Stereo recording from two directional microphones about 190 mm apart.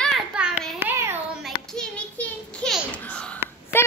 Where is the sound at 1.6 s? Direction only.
5° left (ahead or behind).